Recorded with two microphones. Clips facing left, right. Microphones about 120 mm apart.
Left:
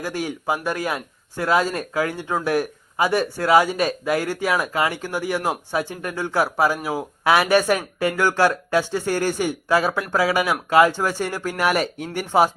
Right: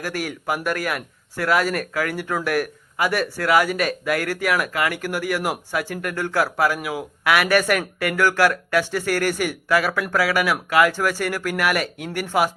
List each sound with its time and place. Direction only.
0.0 s speech: 20° left (ahead or behind)